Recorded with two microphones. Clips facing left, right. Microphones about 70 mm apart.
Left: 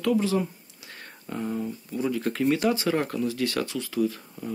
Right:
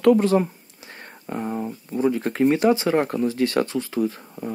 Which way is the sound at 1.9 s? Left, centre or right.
Right.